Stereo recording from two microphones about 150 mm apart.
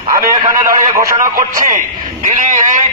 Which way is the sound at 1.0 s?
65° right (ahead or behind).